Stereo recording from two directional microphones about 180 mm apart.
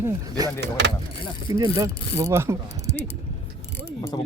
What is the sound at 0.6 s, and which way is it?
Speech, 80° right.